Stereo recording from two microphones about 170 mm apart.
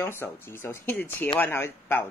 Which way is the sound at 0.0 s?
15° left (ahead or behind).